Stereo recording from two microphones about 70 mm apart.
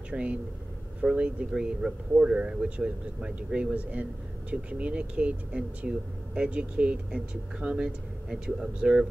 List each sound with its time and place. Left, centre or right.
0.1 s speech: centre